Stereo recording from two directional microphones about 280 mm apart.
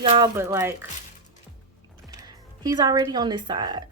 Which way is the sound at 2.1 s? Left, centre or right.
Centre.